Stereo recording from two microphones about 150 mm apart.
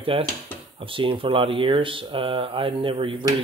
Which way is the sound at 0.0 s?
35° right (ahead or behind).